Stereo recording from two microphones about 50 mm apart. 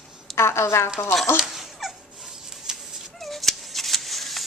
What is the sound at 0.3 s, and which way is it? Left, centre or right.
Speech, left.